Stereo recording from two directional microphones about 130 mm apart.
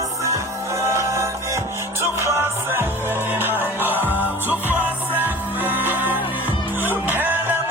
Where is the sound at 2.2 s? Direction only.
20° right (ahead or behind).